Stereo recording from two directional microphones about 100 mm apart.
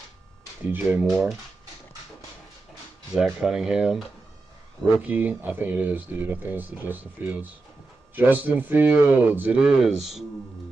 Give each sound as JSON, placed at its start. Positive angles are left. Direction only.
{"t": 0.7, "sound": "speech", "side_deg": -20}
{"t": 3.2, "sound": "speech", "side_deg": -5}
{"t": 5.0, "sound": "speech", "side_deg": -20}
{"t": 9.7, "sound": "speech", "side_deg": -5}